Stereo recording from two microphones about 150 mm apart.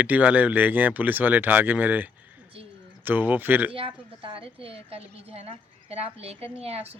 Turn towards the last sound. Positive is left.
turn(degrees=-45)  # may be behind; listen again after turning